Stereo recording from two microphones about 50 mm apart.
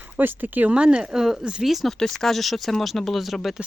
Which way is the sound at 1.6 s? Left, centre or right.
Centre.